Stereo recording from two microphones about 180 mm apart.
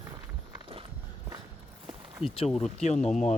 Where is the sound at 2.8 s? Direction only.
40° left (ahead or behind).